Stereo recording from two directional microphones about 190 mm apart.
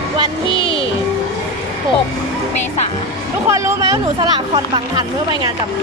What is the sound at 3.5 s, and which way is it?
Speech, 15° right (ahead or behind).